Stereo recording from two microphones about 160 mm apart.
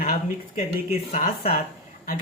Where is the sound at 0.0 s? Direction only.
50° left (ahead or behind).